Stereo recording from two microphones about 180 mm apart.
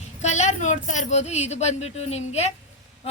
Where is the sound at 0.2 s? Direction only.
40° left (ahead or behind).